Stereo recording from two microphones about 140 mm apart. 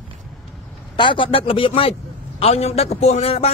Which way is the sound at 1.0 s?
35° left (ahead or behind).